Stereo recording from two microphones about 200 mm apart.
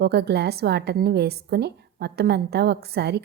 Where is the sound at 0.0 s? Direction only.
55° right (ahead or behind).